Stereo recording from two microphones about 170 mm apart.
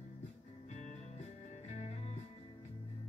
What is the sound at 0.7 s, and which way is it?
Music, 45° left (ahead or behind).